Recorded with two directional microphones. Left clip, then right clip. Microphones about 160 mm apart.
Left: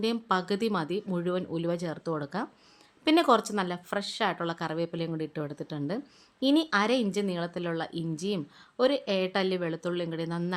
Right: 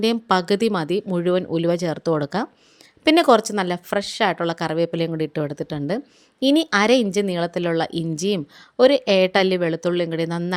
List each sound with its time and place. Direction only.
0.0 s a woman's voice: 40° right (ahead or behind)